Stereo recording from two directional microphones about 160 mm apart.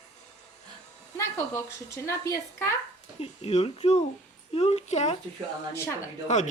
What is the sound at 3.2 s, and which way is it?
Speech, 40° left (ahead or behind).